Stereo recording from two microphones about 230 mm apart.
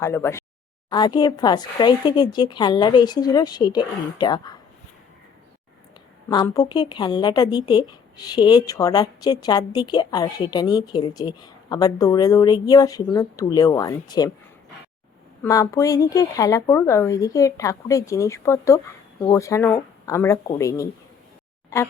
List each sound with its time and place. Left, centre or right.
0.0 s speech: centre
6.2 s speech: centre
15.4 s speech: centre